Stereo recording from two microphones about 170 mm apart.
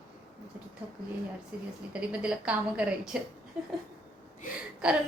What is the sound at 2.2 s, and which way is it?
Speech, 5° right (ahead or behind).